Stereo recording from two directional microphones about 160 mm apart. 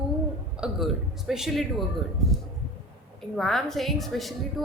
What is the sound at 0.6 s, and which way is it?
A woman's voice, centre (ahead or behind).